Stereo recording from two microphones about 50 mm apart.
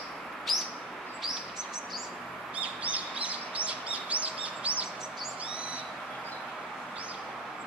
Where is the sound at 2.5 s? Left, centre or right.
Right.